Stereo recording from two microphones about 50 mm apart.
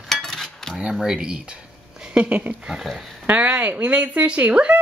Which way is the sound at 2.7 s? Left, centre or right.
Centre.